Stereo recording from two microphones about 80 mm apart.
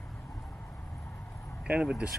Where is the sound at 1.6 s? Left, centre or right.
Centre.